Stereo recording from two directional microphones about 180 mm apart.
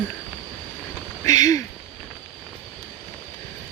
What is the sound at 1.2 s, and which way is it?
Speech, 20° left (ahead or behind).